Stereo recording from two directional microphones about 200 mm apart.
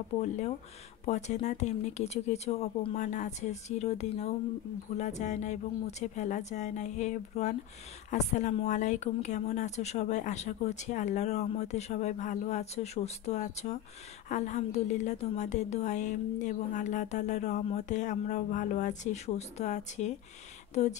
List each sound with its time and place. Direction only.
1.0 s a woman's voice: 35° left (ahead or behind)